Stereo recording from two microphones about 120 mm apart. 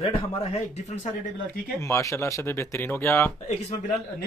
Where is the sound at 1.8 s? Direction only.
25° left (ahead or behind).